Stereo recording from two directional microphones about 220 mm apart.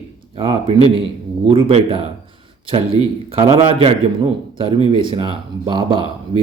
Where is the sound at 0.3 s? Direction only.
25° right (ahead or behind).